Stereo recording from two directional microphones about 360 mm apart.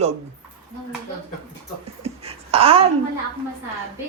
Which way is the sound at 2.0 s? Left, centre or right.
Centre.